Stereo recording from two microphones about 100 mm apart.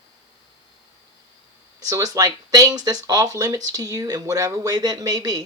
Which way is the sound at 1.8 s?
35° right (ahead or behind).